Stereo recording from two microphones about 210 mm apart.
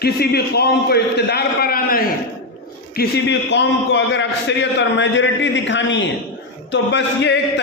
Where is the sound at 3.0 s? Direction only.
55° left (ahead or behind).